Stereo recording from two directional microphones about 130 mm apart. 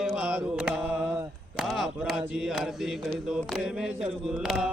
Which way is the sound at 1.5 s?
5° right (ahead or behind).